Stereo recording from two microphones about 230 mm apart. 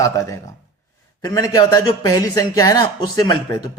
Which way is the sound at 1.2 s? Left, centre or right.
Centre.